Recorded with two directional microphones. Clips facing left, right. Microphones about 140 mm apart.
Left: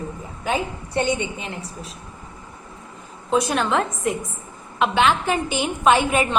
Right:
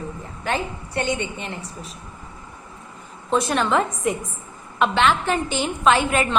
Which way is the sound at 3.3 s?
Centre (ahead or behind).